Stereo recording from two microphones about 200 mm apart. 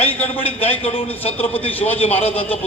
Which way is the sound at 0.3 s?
30° left (ahead or behind).